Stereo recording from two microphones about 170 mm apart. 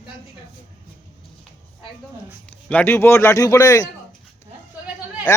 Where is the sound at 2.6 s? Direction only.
10° left (ahead or behind).